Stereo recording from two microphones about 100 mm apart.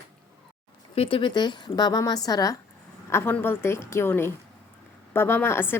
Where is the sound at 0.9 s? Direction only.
65° left (ahead or behind).